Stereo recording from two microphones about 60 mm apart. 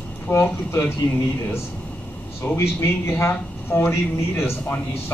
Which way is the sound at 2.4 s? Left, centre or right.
Left.